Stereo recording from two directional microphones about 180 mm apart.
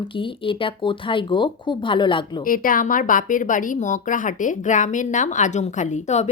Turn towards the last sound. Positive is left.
turn(degrees=40)  # may be behind; listen again after turning